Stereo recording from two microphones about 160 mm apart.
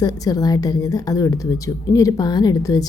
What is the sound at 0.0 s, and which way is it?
A woman's voice, 25° left (ahead or behind).